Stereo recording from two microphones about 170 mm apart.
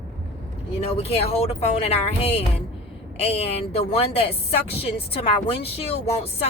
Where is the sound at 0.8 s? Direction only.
35° left (ahead or behind).